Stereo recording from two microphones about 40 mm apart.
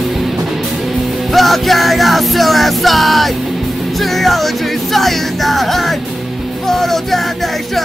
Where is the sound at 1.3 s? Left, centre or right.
Centre.